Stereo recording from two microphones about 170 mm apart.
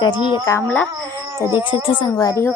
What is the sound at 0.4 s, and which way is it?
Music, 15° left (ahead or behind).